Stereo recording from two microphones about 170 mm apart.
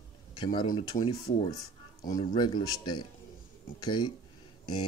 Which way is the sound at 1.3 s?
45° left (ahead or behind).